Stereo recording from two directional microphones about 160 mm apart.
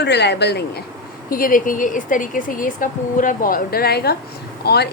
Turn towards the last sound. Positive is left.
turn(degrees=90)